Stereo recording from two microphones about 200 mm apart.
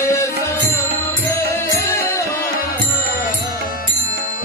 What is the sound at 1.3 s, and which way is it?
Music, 15° left (ahead or behind).